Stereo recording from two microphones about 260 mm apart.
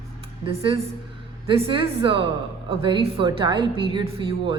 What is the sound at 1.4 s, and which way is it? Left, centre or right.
A woman's voice, right.